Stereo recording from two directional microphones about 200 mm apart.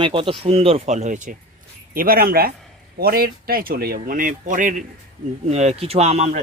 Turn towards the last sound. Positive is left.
turn(degrees=-30)  # may be behind; listen again after turning